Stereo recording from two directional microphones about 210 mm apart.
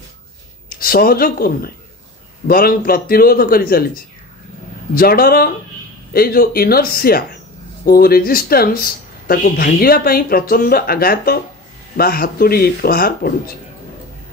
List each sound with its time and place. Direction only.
0.7 s speech: 45° left (ahead or behind)